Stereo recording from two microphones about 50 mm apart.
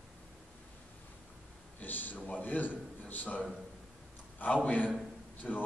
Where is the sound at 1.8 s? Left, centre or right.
Left.